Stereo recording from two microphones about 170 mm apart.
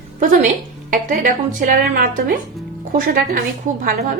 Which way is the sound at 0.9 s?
50° right (ahead or behind).